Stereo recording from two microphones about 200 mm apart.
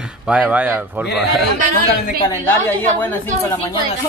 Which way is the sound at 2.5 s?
10° left (ahead or behind).